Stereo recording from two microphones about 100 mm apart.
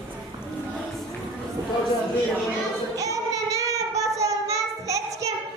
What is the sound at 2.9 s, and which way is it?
Child singing, 35° right (ahead or behind).